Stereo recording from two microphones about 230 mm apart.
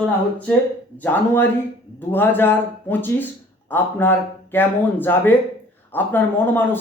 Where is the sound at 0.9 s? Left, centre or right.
Centre.